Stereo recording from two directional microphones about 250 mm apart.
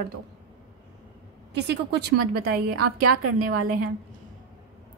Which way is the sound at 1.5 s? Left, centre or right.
Right.